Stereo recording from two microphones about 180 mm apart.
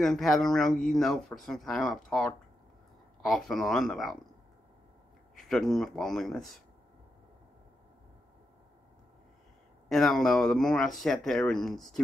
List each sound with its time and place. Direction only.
0.0 s speech: centre (ahead or behind)
5.5 s speech: centre (ahead or behind)
9.8 s speech: centre (ahead or behind)